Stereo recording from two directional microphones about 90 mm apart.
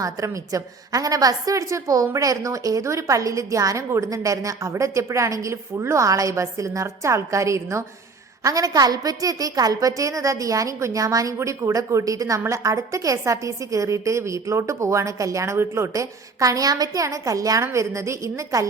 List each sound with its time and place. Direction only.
0.0 s a woman's voice: 40° right (ahead or behind)